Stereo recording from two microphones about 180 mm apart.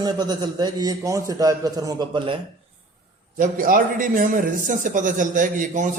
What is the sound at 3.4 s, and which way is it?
A man's voice, 50° right (ahead or behind).